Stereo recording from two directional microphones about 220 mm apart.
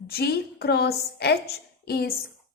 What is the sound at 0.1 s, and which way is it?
A woman's voice, 45° left (ahead or behind).